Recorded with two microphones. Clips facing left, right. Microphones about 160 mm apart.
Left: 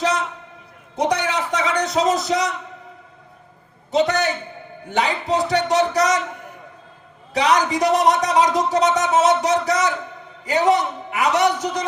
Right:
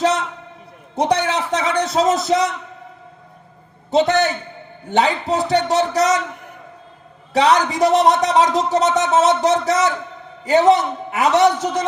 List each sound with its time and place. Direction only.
0.9 s a man's voice: 25° right (ahead or behind)
3.9 s a man's voice: 25° right (ahead or behind)
7.3 s a man's voice: 25° right (ahead or behind)